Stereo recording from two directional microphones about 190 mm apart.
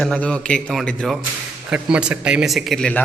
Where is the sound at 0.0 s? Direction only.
5° left (ahead or behind).